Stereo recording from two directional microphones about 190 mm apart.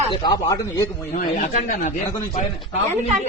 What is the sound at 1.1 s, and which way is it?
Speech, 40° left (ahead or behind).